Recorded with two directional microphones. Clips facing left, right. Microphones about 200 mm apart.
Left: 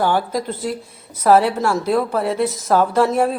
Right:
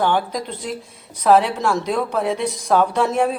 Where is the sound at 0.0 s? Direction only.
5° left (ahead or behind).